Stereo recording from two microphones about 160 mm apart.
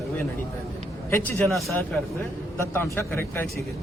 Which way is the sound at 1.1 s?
10° left (ahead or behind).